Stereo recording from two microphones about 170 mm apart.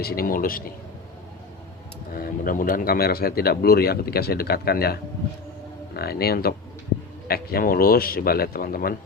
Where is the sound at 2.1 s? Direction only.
55° left (ahead or behind).